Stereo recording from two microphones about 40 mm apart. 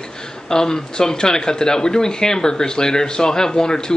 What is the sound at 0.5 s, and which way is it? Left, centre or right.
Speech, centre.